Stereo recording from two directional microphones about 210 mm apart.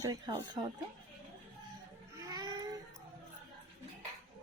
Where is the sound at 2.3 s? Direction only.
20° right (ahead or behind).